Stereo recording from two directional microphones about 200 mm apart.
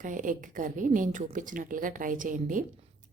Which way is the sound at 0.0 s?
40° right (ahead or behind).